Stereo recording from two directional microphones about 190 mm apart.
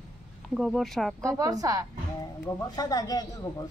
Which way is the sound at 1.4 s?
20° right (ahead or behind).